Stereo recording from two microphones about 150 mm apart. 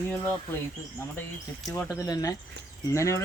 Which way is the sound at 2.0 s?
25° left (ahead or behind).